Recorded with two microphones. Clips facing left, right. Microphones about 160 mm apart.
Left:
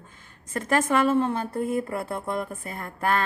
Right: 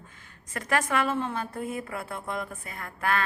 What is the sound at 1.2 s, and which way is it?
Speech, 40° left (ahead or behind).